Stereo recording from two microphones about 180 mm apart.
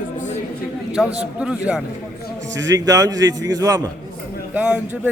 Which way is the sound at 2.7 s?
20° right (ahead or behind).